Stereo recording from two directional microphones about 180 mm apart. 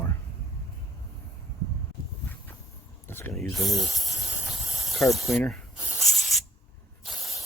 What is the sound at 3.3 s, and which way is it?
Snake, centre (ahead or behind).